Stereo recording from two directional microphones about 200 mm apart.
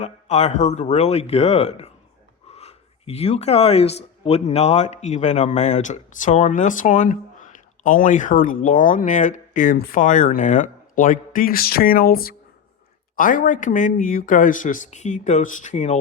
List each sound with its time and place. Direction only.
0.0 s speech: 35° left (ahead or behind)